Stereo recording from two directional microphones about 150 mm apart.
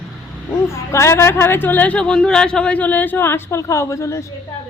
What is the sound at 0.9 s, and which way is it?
Speech, 20° left (ahead or behind).